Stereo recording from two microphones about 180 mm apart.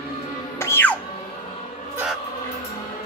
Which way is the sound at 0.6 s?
15° left (ahead or behind).